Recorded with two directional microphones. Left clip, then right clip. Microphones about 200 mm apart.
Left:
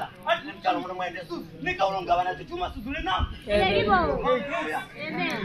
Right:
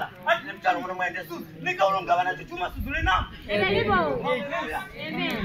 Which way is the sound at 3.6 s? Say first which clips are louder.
Even; 45° right (ahead or behind).